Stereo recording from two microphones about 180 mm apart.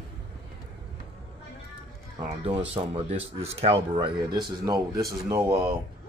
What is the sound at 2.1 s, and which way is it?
Speech, 30° right (ahead or behind).